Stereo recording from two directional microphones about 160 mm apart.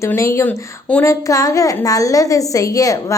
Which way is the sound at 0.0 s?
20° left (ahead or behind).